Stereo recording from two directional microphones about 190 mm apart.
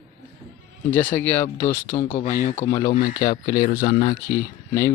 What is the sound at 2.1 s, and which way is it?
Speech, 45° left (ahead or behind).